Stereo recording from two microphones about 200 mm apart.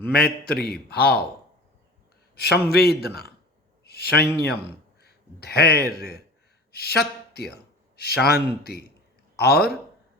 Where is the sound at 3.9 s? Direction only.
50° left (ahead or behind).